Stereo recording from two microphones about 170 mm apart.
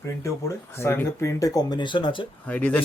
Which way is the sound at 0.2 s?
15° left (ahead or behind).